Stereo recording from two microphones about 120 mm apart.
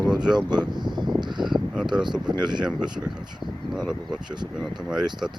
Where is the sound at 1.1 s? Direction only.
40° right (ahead or behind).